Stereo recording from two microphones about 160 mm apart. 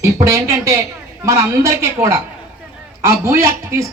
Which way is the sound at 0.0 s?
20° right (ahead or behind).